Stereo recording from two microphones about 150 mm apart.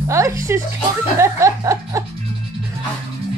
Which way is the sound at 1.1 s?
20° right (ahead or behind).